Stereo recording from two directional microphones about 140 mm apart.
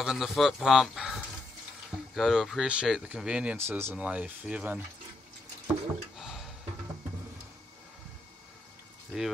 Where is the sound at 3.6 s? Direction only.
20° right (ahead or behind).